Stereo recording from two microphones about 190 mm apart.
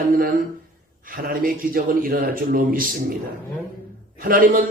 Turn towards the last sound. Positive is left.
turn(degrees=-50)  # may be behind; listen again after turning